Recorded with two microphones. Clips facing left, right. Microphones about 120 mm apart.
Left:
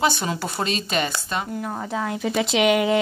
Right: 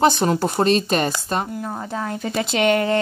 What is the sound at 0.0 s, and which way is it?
Speech, 45° right (ahead or behind).